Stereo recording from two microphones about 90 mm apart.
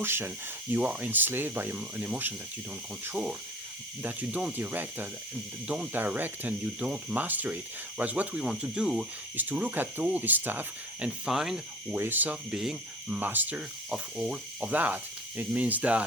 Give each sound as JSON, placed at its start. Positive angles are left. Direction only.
{"t": 0.0, "sound": "speech", "side_deg": -25}
{"t": 0.7, "sound": "speech", "side_deg": -15}
{"t": 11.3, "sound": "speech", "side_deg": -5}
{"t": 11.9, "sound": "speech", "side_deg": -20}
{"t": 13.1, "sound": "speech", "side_deg": -20}